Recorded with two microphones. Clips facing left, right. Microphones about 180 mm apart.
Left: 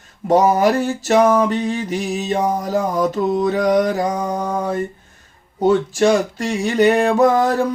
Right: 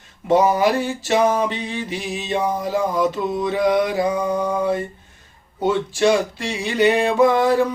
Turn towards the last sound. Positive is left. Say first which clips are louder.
# left 1 dB
turn(degrees=45)  # may be behind; listen again after turning